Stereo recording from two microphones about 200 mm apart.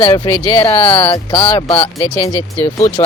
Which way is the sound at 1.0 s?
25° left (ahead or behind).